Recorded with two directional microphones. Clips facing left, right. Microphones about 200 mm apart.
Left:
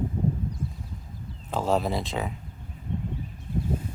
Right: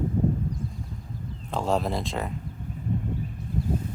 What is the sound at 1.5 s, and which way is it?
Speech, centre (ahead or behind).